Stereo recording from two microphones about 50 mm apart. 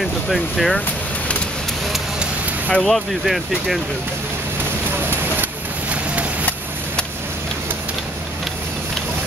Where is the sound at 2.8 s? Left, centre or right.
Centre.